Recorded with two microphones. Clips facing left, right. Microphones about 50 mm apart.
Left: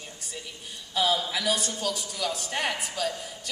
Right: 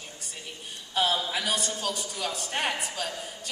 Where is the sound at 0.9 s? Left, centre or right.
Right.